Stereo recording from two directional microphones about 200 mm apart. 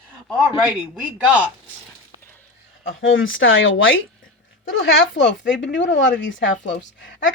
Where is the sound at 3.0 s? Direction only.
75° left (ahead or behind).